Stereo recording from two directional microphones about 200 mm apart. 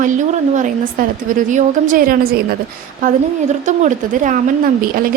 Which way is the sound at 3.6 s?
35° right (ahead or behind).